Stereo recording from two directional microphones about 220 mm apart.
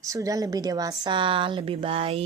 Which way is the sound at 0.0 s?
15° right (ahead or behind).